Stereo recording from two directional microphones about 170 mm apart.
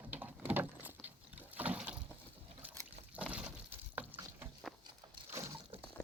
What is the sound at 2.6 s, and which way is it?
Water, 10° right (ahead or behind).